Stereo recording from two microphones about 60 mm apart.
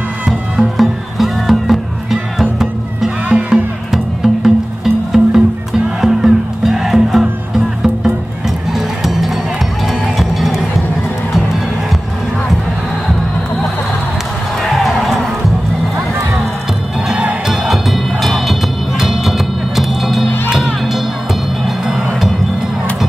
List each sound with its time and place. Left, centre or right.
0.3 s music: centre
3.3 s music: right
3.9 s music: centre
14.6 s basketball bounce: centre
17.1 s music: right
17.5 s music: centre
21.8 s music: centre